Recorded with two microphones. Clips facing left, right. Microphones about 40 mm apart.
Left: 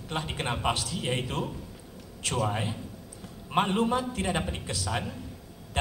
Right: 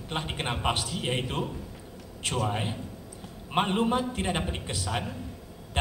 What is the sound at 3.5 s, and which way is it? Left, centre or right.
A woman's voice, right.